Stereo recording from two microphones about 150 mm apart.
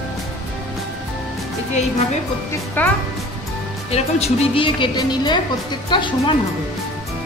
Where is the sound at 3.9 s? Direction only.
45° left (ahead or behind).